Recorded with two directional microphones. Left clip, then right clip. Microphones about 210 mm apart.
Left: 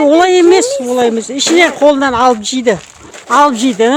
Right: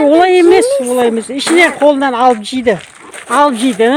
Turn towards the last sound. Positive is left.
turn(degrees=0)  # may be behind; listen again after turning